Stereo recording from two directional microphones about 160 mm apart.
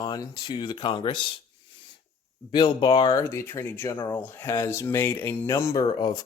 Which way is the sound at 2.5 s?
30° left (ahead or behind).